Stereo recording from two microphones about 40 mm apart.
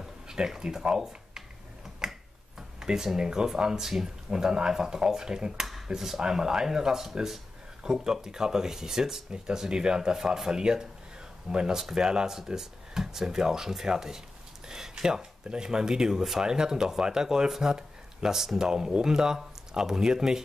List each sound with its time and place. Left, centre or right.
0.0 s speech: centre
2.0 s finger snapping: centre
2.8 s speech: centre